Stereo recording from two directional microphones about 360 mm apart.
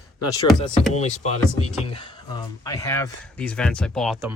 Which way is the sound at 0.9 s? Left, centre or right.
Centre.